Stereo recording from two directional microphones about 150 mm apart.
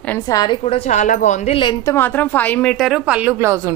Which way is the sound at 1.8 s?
15° left (ahead or behind).